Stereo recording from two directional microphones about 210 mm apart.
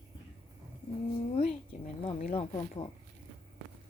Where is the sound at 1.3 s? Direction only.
30° left (ahead or behind).